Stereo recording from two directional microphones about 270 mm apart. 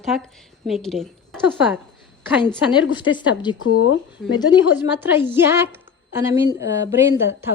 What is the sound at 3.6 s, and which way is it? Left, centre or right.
Speech, left.